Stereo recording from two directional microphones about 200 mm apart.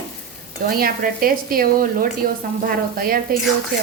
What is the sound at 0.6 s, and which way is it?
Speech, 45° right (ahead or behind).